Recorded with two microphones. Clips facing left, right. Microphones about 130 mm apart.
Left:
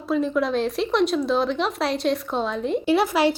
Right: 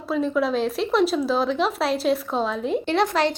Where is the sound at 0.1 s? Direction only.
Centre (ahead or behind).